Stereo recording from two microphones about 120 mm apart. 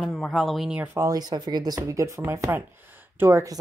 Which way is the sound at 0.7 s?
20° right (ahead or behind).